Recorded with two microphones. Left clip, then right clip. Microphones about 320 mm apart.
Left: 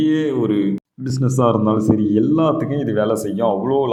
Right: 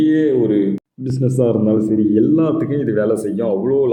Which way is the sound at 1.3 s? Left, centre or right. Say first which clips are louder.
Even; centre.